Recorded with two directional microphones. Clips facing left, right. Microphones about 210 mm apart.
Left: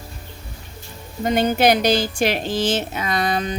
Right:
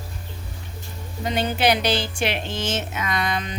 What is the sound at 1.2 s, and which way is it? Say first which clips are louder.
A woman's voice: left 5 dB; 45° left (ahead or behind).